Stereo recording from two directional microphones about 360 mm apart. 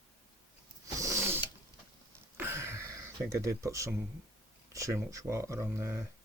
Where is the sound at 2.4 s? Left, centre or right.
Centre.